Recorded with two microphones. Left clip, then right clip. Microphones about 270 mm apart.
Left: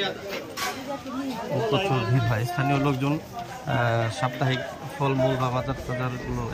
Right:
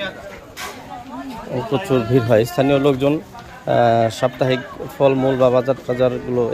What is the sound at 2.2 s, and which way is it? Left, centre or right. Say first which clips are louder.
Speech: right 11 dB; right.